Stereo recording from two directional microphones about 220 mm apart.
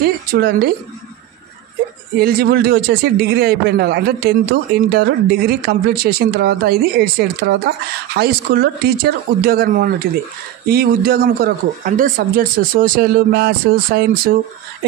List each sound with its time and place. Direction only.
0.0 s speech: 45° right (ahead or behind)
2.1 s speech: 45° right (ahead or behind)